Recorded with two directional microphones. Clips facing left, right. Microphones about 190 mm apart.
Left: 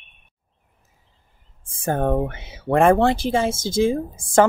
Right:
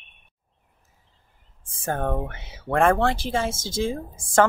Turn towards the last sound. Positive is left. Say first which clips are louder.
# left 3 dB
turn(degrees=15)  # may be behind; listen again after turning